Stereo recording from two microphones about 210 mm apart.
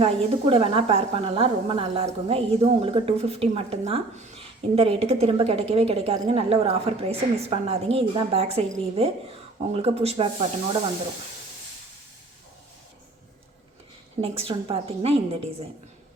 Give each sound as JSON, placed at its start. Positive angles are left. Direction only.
{"t": 0.0, "sound": "a woman's voice", "side_deg": -25}
{"t": 14.2, "sound": "a woman's voice", "side_deg": -25}